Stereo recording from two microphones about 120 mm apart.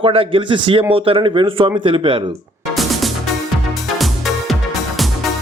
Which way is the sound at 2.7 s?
Centre (ahead or behind).